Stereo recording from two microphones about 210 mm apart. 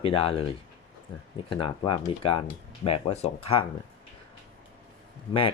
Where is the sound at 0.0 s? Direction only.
25° left (ahead or behind).